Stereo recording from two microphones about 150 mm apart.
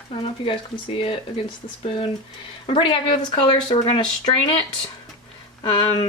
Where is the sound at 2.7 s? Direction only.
35° left (ahead or behind).